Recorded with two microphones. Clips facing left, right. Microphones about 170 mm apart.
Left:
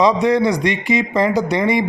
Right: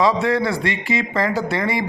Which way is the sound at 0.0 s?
20° left (ahead or behind).